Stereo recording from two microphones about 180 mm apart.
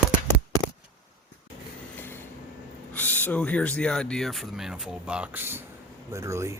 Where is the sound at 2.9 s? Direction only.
10° left (ahead or behind).